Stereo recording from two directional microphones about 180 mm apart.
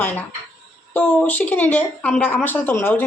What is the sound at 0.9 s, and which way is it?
Speech, 10° left (ahead or behind).